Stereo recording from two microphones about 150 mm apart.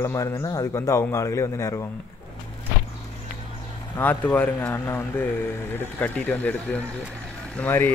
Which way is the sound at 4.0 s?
10° left (ahead or behind).